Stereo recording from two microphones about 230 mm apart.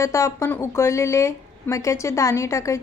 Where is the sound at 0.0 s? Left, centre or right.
Centre.